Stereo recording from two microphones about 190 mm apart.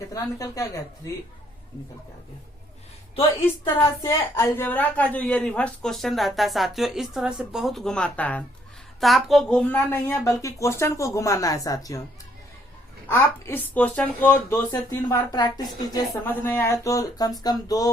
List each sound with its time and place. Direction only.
0.1 s speech: 15° left (ahead or behind)
3.6 s a woman's voice: 15° left (ahead or behind)
13.1 s speech: 15° left (ahead or behind)